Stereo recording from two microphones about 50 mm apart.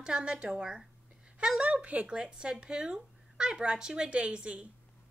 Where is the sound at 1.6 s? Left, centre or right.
Right.